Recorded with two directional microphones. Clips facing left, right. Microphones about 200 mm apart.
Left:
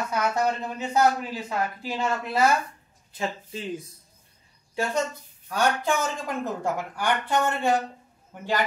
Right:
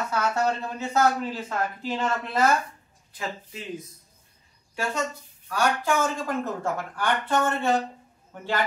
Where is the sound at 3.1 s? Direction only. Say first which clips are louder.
Left 3 dB; 30° left (ahead or behind).